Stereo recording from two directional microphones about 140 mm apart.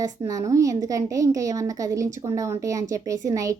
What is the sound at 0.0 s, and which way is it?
Speech, 25° right (ahead or behind).